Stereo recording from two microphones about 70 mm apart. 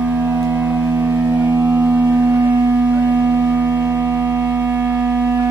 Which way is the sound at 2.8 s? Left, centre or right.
Right.